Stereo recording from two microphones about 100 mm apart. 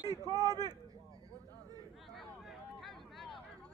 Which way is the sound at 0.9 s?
35° right (ahead or behind).